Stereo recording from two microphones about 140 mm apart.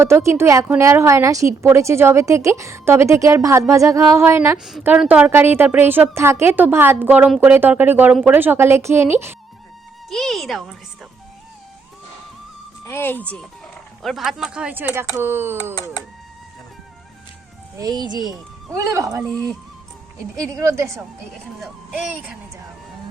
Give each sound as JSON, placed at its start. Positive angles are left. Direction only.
{"t": 0.0, "sound": "a woman's voice", "side_deg": -20}
{"t": 4.5, "sound": "a woman's voice", "side_deg": 0}
{"t": 10.1, "sound": "speech", "side_deg": 0}
{"t": 12.8, "sound": "a woman's voice", "side_deg": 15}
{"t": 17.7, "sound": "a woman's voice", "side_deg": -30}
{"t": 20.3, "sound": "a woman's voice", "side_deg": -20}
{"t": 21.6, "sound": "speech", "side_deg": -5}